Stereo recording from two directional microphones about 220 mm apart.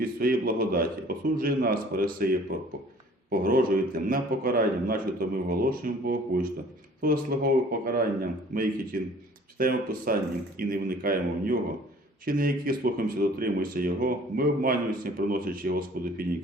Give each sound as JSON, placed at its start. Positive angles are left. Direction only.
{"t": 0.0, "sound": "speech", "side_deg": -40}